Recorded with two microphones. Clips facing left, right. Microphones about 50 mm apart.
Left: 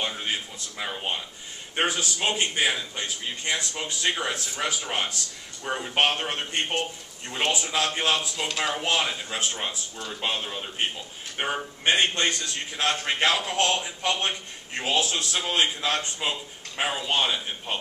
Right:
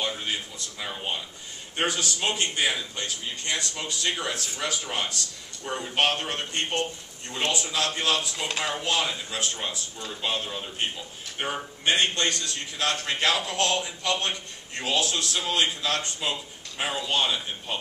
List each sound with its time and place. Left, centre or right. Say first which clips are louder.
0.0 s a man's voice: even; centre